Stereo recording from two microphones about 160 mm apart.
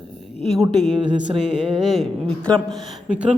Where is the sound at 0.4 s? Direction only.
Centre (ahead or behind).